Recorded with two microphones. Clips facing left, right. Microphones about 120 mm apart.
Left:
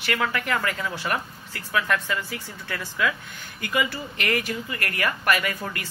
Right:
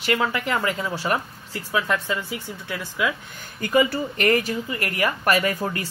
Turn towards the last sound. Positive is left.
turn(degrees=-30)  # may be behind; listen again after turning